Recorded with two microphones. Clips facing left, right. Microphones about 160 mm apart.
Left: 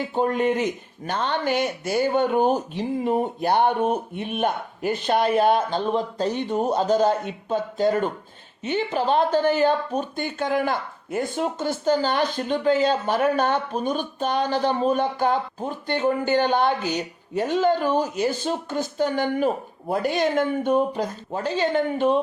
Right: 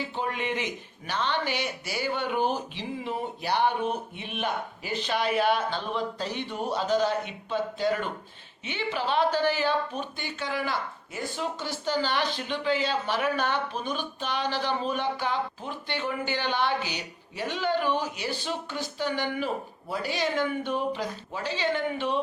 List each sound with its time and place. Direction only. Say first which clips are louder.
0.0 s a woman's voice: left 9 dB; 45° left (ahead or behind)